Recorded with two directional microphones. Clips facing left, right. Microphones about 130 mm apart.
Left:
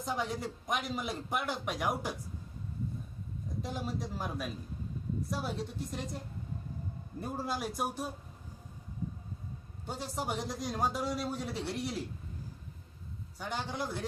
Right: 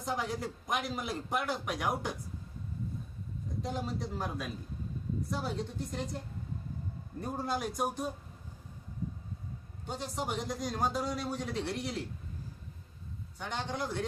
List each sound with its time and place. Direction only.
0.0 s a man's voice: centre (ahead or behind)
3.6 s a man's voice: centre (ahead or behind)
7.2 s a man's voice: centre (ahead or behind)
9.8 s a man's voice: 5° left (ahead or behind)
13.4 s a man's voice: 5° left (ahead or behind)